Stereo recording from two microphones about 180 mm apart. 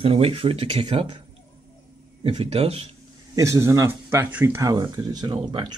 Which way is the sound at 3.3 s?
15° right (ahead or behind).